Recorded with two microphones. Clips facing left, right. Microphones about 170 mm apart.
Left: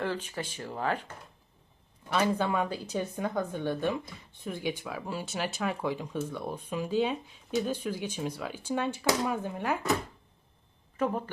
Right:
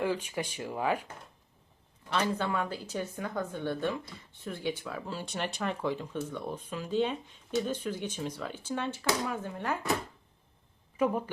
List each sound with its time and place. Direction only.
0.0 s speech: 10° right (ahead or behind)
2.0 s speech: 10° left (ahead or behind)
10.9 s speech: 10° right (ahead or behind)